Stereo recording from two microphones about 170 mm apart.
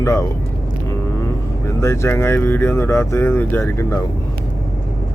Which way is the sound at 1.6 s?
15° left (ahead or behind).